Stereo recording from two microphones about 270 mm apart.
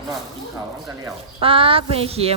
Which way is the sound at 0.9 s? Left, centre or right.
Centre.